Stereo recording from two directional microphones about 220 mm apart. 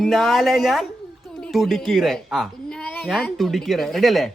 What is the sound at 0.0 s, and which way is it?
A woman's voice, centre (ahead or behind).